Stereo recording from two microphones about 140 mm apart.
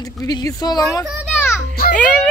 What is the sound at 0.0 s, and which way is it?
Speech, 25° left (ahead or behind).